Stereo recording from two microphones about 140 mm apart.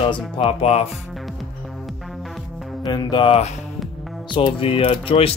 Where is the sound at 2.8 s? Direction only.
30° left (ahead or behind).